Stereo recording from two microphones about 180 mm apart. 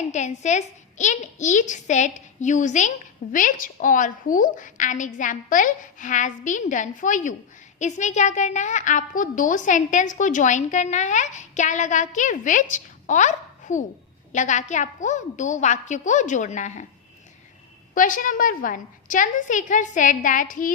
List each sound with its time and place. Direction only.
0.1 s a woman's voice: 40° left (ahead or behind)
17.9 s a woman's voice: 50° left (ahead or behind)